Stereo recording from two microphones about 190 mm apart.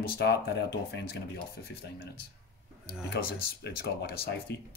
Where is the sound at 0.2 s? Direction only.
60° left (ahead or behind).